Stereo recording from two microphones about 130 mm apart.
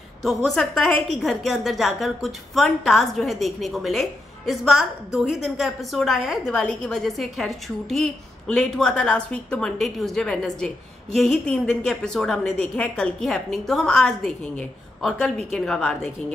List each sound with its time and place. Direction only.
0.2 s a woman's voice: centre (ahead or behind)